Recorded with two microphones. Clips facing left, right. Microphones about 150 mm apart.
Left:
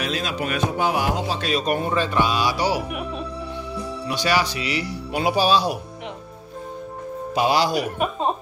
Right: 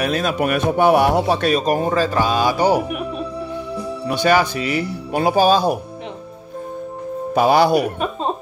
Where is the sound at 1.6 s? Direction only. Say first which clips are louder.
Right 4 dB; 40° right (ahead or behind).